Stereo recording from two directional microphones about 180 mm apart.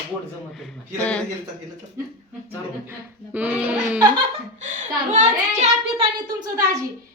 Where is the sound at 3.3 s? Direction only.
10° right (ahead or behind).